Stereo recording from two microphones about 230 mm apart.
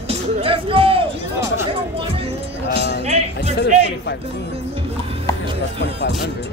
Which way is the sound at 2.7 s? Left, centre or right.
Left.